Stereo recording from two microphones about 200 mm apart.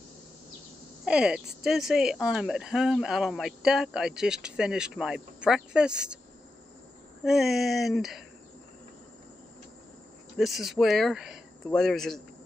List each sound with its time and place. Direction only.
1.0 s speech: 5° right (ahead or behind)
7.2 s speech: centre (ahead or behind)
10.3 s speech: centre (ahead or behind)